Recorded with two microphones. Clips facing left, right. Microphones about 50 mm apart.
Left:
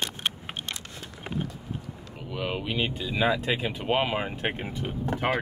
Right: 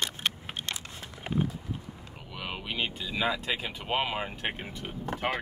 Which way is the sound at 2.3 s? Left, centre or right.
Centre.